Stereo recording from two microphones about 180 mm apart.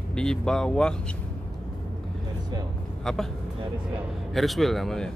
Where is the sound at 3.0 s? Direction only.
Centre (ahead or behind).